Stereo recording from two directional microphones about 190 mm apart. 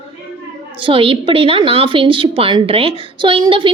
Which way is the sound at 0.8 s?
30° right (ahead or behind).